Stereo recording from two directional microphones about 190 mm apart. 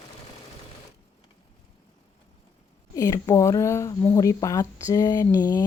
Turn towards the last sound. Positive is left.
turn(degrees=20)  # may be behind; listen again after turning